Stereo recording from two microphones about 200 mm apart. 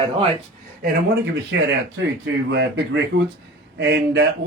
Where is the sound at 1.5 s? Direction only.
60° right (ahead or behind).